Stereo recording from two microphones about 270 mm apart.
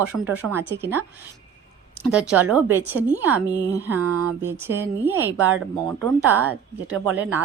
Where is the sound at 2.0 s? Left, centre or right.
Centre.